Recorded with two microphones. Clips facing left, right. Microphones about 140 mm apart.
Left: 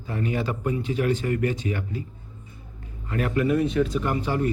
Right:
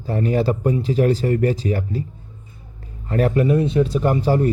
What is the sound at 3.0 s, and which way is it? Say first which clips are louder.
Speech: right 6 dB; 40° right (ahead or behind).